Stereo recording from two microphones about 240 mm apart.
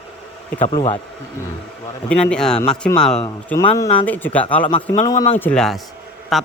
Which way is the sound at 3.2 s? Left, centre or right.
Centre.